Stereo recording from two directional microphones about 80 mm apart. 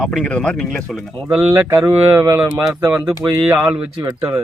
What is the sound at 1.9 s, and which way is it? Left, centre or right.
Speech, right.